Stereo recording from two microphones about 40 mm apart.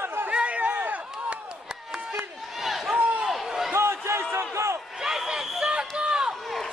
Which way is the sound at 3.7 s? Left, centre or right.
Right.